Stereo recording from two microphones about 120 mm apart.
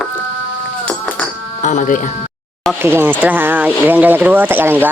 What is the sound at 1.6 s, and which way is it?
Speech, 90° left.